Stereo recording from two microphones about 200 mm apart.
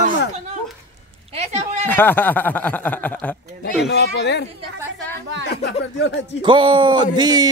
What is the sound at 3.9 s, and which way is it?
Speech, 55° left (ahead or behind).